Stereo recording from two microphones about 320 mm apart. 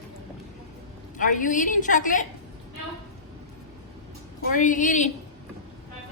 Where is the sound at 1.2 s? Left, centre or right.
Left.